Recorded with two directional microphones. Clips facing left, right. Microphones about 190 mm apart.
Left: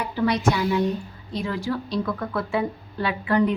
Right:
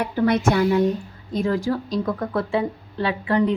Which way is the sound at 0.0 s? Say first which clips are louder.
Right 3 dB; 55° right (ahead or behind).